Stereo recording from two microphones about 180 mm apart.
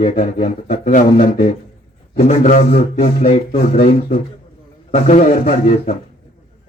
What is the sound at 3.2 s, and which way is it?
Speech, 35° left (ahead or behind).